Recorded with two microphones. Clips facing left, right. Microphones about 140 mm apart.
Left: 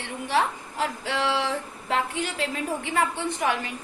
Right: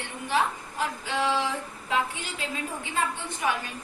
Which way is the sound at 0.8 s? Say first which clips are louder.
Left 1 dB; 70° left (ahead or behind).